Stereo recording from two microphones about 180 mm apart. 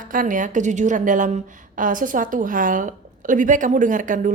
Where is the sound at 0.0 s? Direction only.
50° right (ahead or behind).